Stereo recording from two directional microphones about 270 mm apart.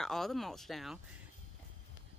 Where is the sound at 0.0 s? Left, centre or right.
Centre.